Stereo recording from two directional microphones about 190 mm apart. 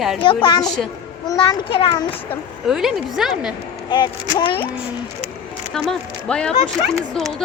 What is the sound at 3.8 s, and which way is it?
Speech, 25° left (ahead or behind).